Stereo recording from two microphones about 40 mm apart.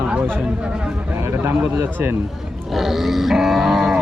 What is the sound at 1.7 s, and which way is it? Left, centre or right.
Speech, right.